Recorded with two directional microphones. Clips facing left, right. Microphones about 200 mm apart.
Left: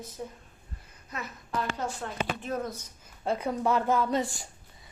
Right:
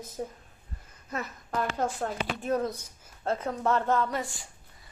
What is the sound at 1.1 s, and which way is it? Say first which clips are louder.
Speech: right 4 dB; 45° right (ahead or behind).